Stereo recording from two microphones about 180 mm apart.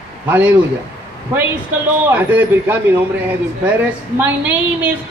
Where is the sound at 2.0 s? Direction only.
10° right (ahead or behind).